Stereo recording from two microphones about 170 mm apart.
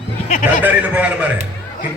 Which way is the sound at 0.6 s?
10° right (ahead or behind).